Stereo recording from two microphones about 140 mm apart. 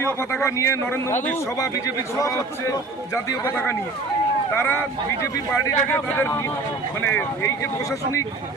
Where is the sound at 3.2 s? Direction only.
20° left (ahead or behind).